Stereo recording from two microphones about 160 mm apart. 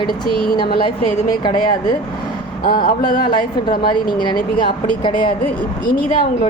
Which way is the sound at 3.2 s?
30° left (ahead or behind).